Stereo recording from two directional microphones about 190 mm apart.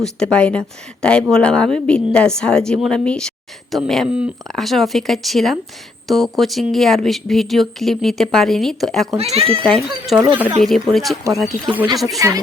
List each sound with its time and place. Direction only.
0.0 s a woman's voice: 5° left (ahead or behind)
9.1 s speech: 30° right (ahead or behind)
9.6 s a woman's voice: centre (ahead or behind)
12.2 s speech: 15° right (ahead or behind)